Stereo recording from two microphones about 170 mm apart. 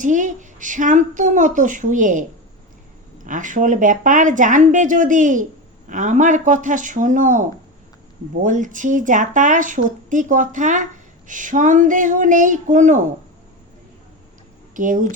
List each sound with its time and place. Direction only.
0.0 s speech: 50° right (ahead or behind)
3.2 s speech: 50° right (ahead or behind)
14.8 s speech: 50° right (ahead or behind)